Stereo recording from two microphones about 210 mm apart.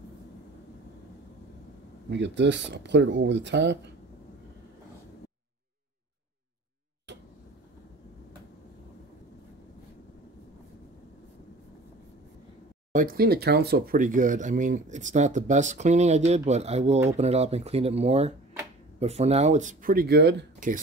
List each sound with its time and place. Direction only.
2.0 s speech: 55° right (ahead or behind)
12.9 s speech: 45° right (ahead or behind)